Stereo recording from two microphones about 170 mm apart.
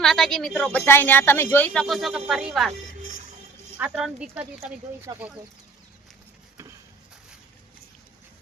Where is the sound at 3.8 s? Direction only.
5° right (ahead or behind).